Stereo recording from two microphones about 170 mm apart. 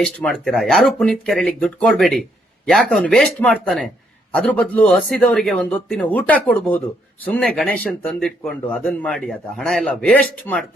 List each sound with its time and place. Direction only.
0.0 s speech: 5° left (ahead or behind)